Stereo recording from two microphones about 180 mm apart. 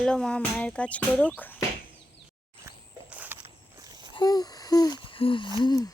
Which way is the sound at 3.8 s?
20° right (ahead or behind).